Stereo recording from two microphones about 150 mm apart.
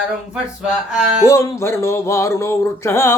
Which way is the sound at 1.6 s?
20° left (ahead or behind).